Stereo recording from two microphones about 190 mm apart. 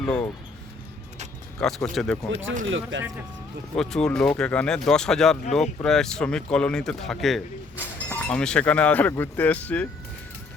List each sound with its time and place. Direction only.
0.0 s basketball bounce: 5° left (ahead or behind)
1.5 s speech: centre (ahead or behind)
2.6 s speech: 80° right
3.8 s speech: 5° left (ahead or behind)